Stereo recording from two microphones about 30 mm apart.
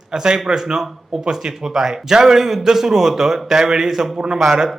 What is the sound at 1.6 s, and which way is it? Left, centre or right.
A man's voice, centre.